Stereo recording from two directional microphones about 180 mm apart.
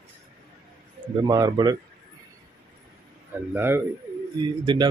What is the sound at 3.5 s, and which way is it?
Speech, 10° right (ahead or behind).